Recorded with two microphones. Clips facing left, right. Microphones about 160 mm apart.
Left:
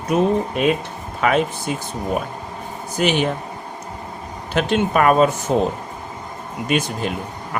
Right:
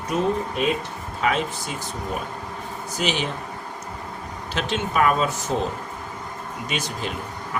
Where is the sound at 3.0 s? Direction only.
55° left (ahead or behind).